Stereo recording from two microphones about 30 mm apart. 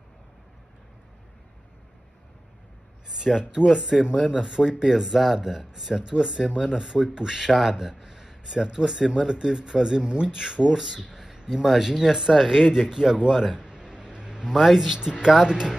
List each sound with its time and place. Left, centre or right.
3.1 s a sound: centre
3.3 s speech: centre
5.0 s speech: centre
5.9 s speech: right
7.4 s speech: centre
7.9 s a sound: centre
9.6 s speech: centre
10.0 s speech: right
10.3 s speech: right
11.4 s speech: centre
12.9 s speech: right
13.6 s a sound: right
14.5 s speech: centre
15.0 s speech: right